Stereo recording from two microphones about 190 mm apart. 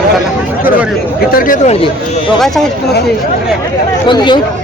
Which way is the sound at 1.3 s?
45° left (ahead or behind).